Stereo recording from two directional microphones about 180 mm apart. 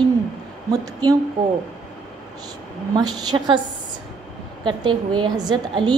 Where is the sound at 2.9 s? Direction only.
25° right (ahead or behind).